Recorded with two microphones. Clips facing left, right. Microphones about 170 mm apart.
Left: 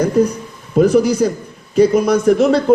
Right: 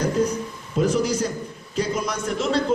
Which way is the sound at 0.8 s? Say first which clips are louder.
Left 9 dB; 60° left (ahead or behind).